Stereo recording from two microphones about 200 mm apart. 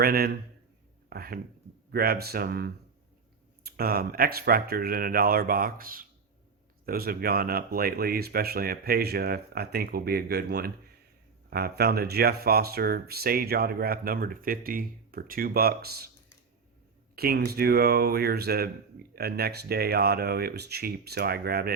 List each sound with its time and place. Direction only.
0.0 s speech: 50° right (ahead or behind)
17.2 s speech: 50° right (ahead or behind)